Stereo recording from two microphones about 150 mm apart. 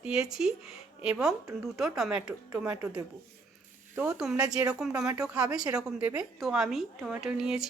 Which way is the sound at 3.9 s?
5° right (ahead or behind).